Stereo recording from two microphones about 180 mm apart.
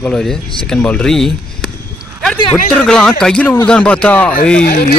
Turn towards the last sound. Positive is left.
turn(degrees=60)  # may be behind; listen again after turning